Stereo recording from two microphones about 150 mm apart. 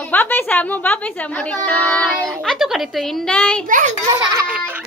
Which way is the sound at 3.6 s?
60° right (ahead or behind).